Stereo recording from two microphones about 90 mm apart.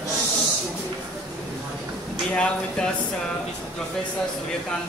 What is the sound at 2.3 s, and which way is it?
Speech, 10° left (ahead or behind).